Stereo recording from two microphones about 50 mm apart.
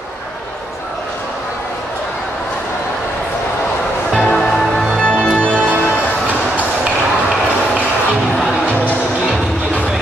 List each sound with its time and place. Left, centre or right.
4.1 s music: centre; by 5.7 s left